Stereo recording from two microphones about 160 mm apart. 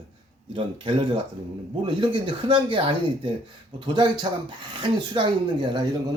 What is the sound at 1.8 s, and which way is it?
Speech, 30° right (ahead or behind).